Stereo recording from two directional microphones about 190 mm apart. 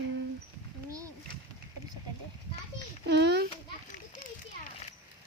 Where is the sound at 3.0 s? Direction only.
60° right (ahead or behind).